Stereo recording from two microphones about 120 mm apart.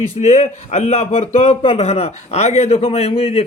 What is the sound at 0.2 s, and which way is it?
A man's voice, 75° left (ahead or behind).